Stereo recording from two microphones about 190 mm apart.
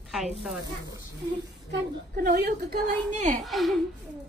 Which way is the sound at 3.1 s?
40° right (ahead or behind).